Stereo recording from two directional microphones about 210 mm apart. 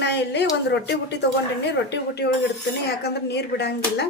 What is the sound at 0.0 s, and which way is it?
Speech, 55° left (ahead or behind).